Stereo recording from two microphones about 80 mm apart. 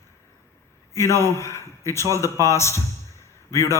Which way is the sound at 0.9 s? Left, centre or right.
Left.